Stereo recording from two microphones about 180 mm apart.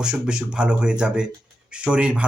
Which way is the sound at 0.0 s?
5° right (ahead or behind).